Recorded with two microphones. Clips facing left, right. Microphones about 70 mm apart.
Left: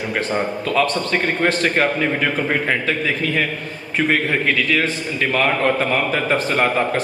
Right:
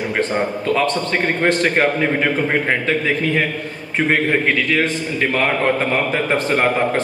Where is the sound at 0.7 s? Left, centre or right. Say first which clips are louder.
Left 2 dB; right.